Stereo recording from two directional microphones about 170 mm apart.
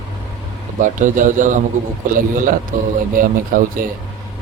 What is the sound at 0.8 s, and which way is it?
A man's voice, 50° right (ahead or behind).